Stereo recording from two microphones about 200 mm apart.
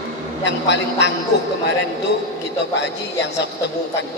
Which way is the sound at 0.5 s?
60° left (ahead or behind).